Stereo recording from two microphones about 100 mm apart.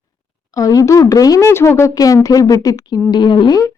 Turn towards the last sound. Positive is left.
turn(degrees=45)  # may be behind; listen again after turning